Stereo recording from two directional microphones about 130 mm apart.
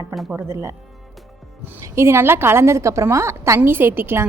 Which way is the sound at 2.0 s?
20° right (ahead or behind).